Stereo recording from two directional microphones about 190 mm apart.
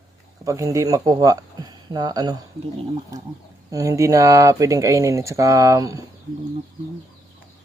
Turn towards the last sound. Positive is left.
turn(degrees=-15)  # may be behind; listen again after turning